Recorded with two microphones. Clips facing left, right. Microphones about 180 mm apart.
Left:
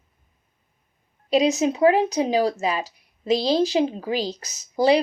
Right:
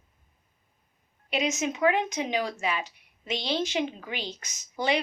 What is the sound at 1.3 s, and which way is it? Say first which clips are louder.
Speech: left 9 dB; 35° left (ahead or behind).